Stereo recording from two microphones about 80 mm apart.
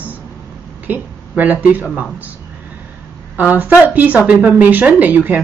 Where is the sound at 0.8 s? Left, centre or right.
Right.